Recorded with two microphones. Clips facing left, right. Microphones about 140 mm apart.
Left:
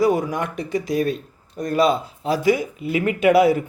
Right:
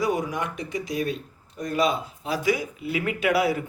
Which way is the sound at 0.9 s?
45° left (ahead or behind).